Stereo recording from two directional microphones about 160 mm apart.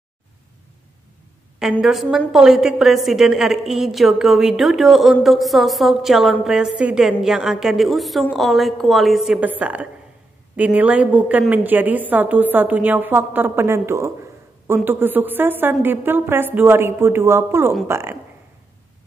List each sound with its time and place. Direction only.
1.6 s a woman's voice: 5° right (ahead or behind)